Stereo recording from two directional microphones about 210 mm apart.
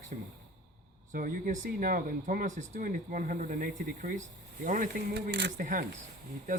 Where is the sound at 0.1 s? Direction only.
40° right (ahead or behind).